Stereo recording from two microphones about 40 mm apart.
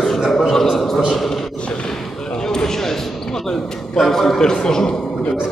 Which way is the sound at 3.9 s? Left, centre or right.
Centre.